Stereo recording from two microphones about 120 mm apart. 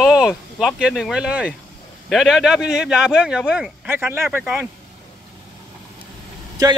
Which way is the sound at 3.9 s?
20° right (ahead or behind).